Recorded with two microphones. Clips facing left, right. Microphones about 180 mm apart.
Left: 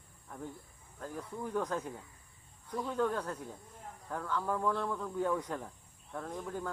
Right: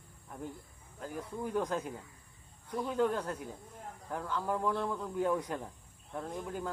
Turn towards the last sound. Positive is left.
turn(degrees=-10)  # may be behind; listen again after turning